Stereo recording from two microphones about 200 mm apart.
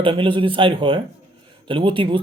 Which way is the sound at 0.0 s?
25° right (ahead or behind).